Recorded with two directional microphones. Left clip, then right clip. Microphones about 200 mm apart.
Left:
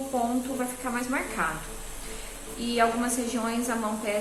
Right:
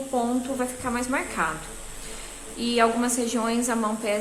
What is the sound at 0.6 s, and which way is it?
Speech, 25° right (ahead or behind).